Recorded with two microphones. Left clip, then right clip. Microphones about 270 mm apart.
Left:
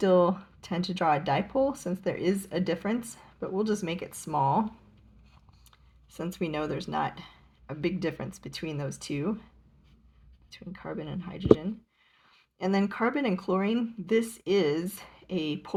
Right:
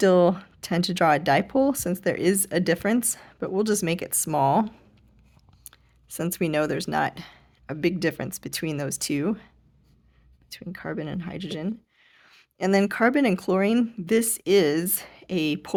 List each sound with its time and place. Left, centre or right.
0.0 s speech: right
5.7 s speech: right
10.5 s speech: right